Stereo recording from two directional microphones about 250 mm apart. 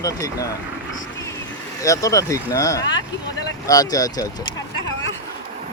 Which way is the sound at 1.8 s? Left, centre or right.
Centre.